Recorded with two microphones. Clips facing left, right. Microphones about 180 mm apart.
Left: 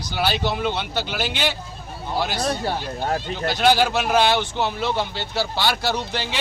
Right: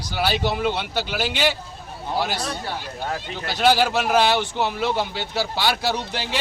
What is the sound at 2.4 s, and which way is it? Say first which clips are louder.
Speech: left 5 dB; 40° left (ahead or behind).